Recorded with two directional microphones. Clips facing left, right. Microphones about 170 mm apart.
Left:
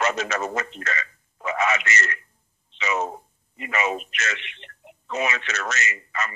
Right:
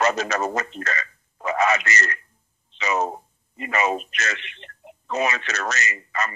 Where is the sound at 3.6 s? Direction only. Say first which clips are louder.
Right 3 dB; 40° right (ahead or behind).